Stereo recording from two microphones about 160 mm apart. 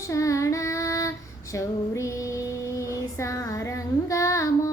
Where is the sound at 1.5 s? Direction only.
20° left (ahead or behind).